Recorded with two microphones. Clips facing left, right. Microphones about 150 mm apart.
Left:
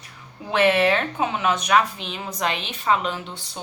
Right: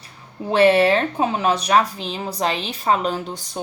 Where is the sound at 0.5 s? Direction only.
35° right (ahead or behind).